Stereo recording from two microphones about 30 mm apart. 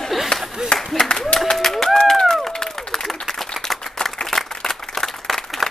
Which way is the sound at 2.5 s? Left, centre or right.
Centre.